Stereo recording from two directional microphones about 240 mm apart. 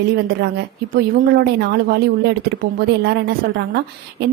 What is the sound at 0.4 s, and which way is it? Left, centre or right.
Speech, right.